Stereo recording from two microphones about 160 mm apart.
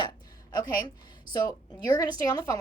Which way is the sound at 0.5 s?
25° left (ahead or behind).